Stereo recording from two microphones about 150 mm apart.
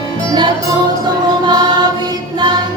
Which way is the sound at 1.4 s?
30° right (ahead or behind).